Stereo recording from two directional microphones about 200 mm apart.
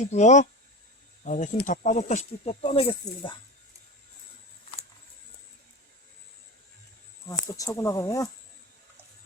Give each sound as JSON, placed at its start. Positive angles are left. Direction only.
{"t": 0.0, "sound": "speech", "side_deg": 35}
{"t": 7.3, "sound": "speech", "side_deg": 15}